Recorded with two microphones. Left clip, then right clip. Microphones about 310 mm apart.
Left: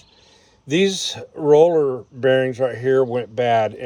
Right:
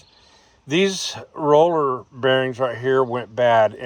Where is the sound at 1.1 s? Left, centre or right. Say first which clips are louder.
Left 1 dB; right.